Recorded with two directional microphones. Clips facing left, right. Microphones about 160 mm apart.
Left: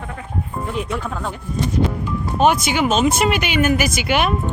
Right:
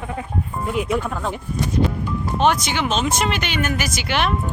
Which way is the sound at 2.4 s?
10° left (ahead or behind).